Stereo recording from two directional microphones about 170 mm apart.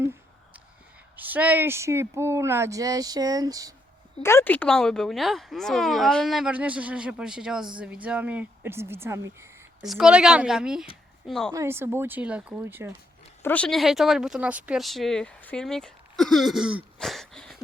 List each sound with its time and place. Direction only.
1.1 s speech: 10° right (ahead or behind)
4.2 s a woman's voice: 15° left (ahead or behind); by 9.5 s 15° right (ahead or behind)
9.8 s a woman's voice: centre (ahead or behind)
11.5 s speech: 15° right (ahead or behind)
13.4 s a woman's voice: 10° left (ahead or behind)